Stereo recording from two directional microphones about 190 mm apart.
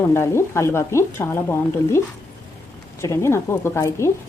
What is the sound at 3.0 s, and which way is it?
Speech, 15° left (ahead or behind).